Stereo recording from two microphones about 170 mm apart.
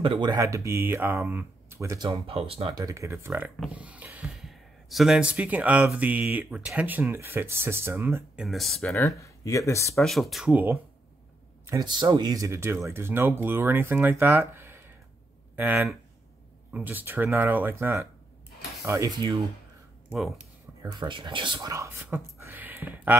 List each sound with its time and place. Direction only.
0.0 s speech: 30° right (ahead or behind)
2.0 s speech: 35° right (ahead or behind)
2.7 s speech: 20° right (ahead or behind)
8.5 s speech: centre (ahead or behind)
8.9 s speech: 20° left (ahead or behind)
9.9 s speech: centre (ahead or behind)
11.6 s speech: 20° right (ahead or behind)
20.8 s speech: 25° right (ahead or behind)